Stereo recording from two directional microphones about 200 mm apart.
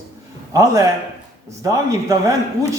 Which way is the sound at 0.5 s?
15° right (ahead or behind).